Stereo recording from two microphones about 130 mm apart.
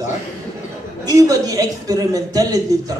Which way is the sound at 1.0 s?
25° right (ahead or behind).